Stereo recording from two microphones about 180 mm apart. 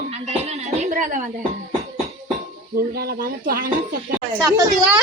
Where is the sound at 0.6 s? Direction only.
40° right (ahead or behind).